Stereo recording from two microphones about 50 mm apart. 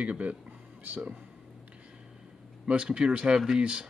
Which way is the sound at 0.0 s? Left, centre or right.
Right.